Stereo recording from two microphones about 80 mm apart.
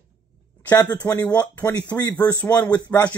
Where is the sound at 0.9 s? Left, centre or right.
Centre.